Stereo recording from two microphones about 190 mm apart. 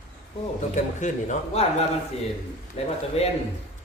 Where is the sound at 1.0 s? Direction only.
35° left (ahead or behind).